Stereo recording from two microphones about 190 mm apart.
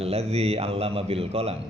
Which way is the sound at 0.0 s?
30° right (ahead or behind).